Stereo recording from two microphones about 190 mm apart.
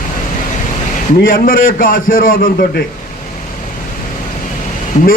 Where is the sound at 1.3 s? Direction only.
45° left (ahead or behind).